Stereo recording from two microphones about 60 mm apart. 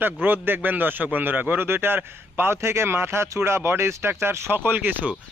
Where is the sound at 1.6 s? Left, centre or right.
Right.